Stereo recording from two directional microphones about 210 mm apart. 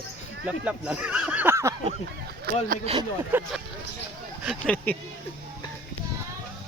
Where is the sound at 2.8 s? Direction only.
25° right (ahead or behind).